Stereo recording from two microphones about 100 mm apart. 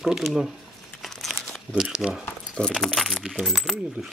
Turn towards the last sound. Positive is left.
turn(degrees=0)  # may be behind; listen again after turning